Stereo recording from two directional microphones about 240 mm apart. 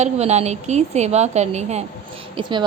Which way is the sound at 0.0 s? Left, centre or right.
Right.